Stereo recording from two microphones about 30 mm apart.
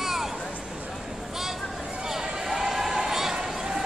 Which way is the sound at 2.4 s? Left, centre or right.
Centre.